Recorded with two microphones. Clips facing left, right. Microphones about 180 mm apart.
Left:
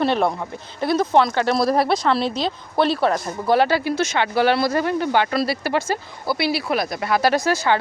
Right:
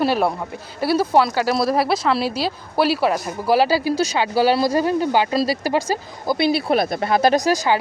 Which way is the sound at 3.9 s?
35° right (ahead or behind).